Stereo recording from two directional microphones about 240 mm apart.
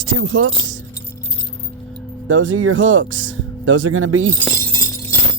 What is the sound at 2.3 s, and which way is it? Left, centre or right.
Speech, right.